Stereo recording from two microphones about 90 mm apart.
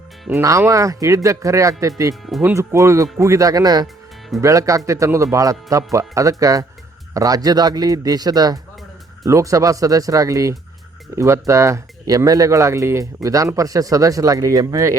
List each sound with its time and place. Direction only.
0.3 s speech: 20° right (ahead or behind)
0.7 s speech: 35° right (ahead or behind)